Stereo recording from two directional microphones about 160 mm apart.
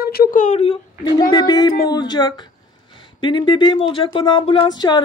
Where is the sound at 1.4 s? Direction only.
25° left (ahead or behind).